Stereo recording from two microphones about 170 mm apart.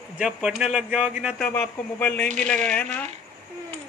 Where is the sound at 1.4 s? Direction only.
10° left (ahead or behind).